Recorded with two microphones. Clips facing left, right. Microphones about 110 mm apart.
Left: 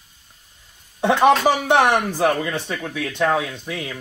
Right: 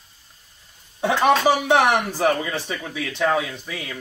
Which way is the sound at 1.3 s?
5° right (ahead or behind).